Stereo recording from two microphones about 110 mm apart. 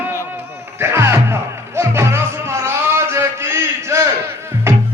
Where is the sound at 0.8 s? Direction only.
25° right (ahead or behind).